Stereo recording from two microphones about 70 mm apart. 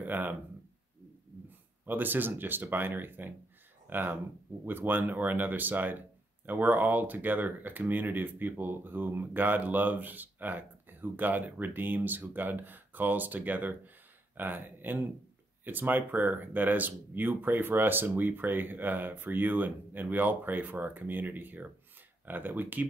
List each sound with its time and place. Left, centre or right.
0.0 s speech: right
1.9 s speech: right